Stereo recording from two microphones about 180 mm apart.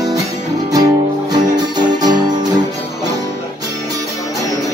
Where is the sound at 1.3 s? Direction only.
20° right (ahead or behind).